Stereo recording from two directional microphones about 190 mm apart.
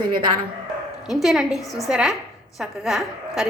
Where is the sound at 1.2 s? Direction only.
Centre (ahead or behind).